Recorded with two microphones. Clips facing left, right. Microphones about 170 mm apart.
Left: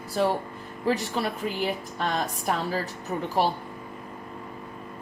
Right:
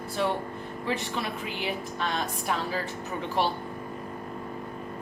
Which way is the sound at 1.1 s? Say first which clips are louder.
Left 4 dB; 45° left (ahead or behind).